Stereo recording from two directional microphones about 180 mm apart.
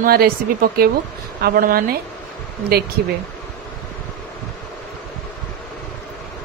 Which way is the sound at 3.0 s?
55° right (ahead or behind).